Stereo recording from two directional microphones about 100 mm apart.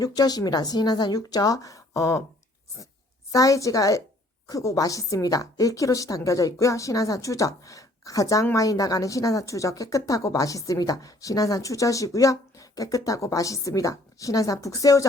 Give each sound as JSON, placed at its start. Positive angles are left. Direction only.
{"t": 0.0, "sound": "a woman's voice", "side_deg": 40}
{"t": 3.3, "sound": "a woman's voice", "side_deg": 35}